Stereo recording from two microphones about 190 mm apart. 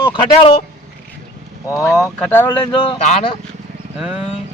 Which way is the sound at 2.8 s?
30° left (ahead or behind).